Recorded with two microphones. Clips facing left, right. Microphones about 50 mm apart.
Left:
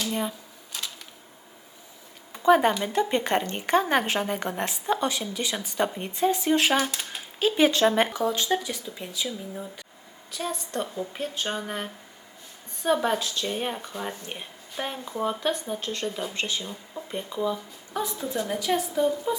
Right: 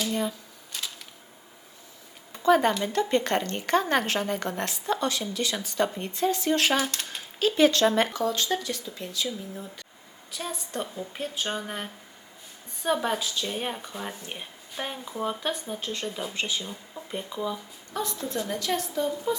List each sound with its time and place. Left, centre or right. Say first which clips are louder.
0.1 s a sound: right 1 dB; centre
0.7 s typewriter: even; centre
2.3 s speech: left 2 dB; centre
10.3 s speech: left 3 dB; centre
17.9 s speech: left 2 dB; centre